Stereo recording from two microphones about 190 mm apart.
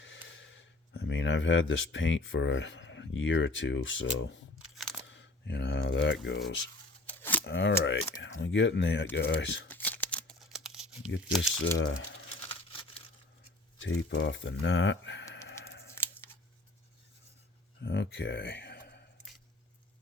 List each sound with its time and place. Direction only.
0.0 s speech: 80° left
4.5 s a sound: centre (ahead or behind)
5.1 s speech: 65° left (ahead or behind)
7.0 s a sound: 10° left (ahead or behind)
7.4 s speech: 65° left (ahead or behind)
9.6 s crumpling: 10° left (ahead or behind)
11.2 s speech: centre (ahead or behind)
11.6 s speech: 70° left (ahead or behind)
12.5 s tearing: 30° left (ahead or behind)
13.7 s a sound: 80° left; by 15.9 s 60° left (ahead or behind)
15.9 s scissors: 15° left (ahead or behind)
17.8 s speech: 65° left (ahead or behind)